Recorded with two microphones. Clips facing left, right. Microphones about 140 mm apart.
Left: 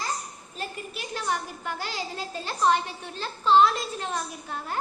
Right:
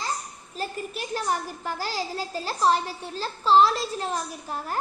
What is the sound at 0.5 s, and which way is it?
A child's voice, 40° right (ahead or behind).